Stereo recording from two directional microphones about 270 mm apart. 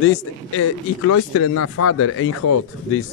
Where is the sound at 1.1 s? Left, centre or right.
Left.